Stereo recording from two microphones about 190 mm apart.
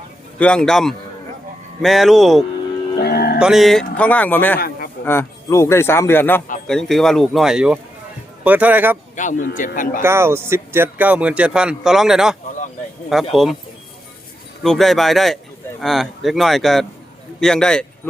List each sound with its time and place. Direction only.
0.3 s speech: 5° left (ahead or behind)
3.0 s music: 55° left (ahead or behind)
3.3 s speech: 5° right (ahead or behind)
9.1 s speech: 40° left (ahead or behind)
10.0 s speech: 15° right (ahead or behind)
14.6 s speech: centre (ahead or behind)